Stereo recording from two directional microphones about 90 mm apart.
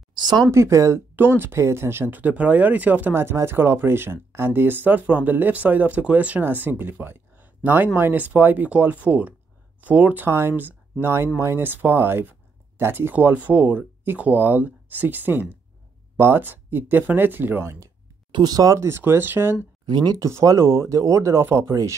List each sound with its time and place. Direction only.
0.1 s a sound: 55° right (ahead or behind)
0.5 s speech: 35° right (ahead or behind)
18.3 s speech: 45° right (ahead or behind); by 19.5 s 25° right (ahead or behind)
19.9 s speech: 55° right (ahead or behind)
20.2 s speech: 35° right (ahead or behind)